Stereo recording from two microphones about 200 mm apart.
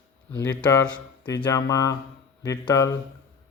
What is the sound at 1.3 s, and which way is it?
Speech, 20° left (ahead or behind).